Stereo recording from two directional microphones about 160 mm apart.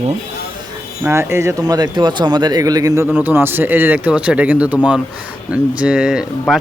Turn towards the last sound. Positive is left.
turn(degrees=-5)  # may be behind; listen again after turning